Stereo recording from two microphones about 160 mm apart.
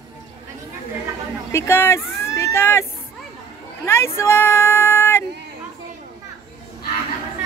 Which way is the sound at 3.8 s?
15° left (ahead or behind).